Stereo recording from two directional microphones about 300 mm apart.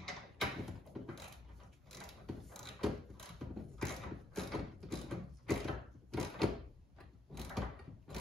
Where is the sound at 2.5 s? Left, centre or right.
Centre.